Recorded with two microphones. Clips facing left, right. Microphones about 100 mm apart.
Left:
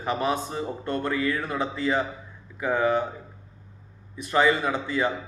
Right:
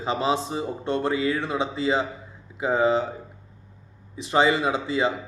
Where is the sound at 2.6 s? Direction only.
25° right (ahead or behind).